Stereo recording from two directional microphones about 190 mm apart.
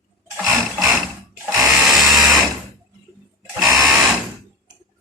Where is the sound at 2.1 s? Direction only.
20° right (ahead or behind).